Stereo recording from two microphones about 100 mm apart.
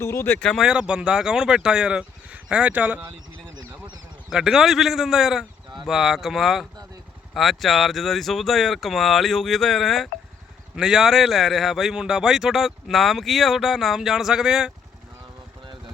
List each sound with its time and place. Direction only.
0.0 s speech: 25° left (ahead or behind)
0.3 s speech: 10° left (ahead or behind)
0.6 s speech: 10° right (ahead or behind)
4.3 s speech: 5° right (ahead or behind)